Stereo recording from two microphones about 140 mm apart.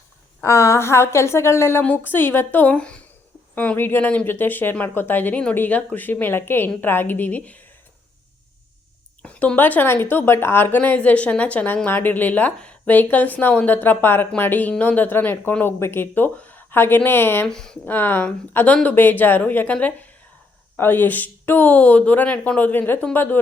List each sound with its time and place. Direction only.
0.4 s a woman's voice: 20° left (ahead or behind)
9.2 s a woman's voice: 10° left (ahead or behind)
17.5 s a woman's voice: 5° left (ahead or behind)